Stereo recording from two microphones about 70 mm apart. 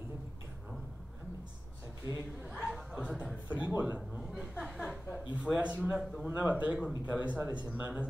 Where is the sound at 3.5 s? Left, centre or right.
Right.